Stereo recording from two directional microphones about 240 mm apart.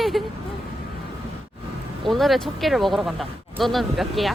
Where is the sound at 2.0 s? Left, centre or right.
Centre.